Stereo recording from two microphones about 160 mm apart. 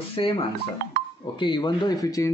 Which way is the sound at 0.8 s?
70° right (ahead or behind).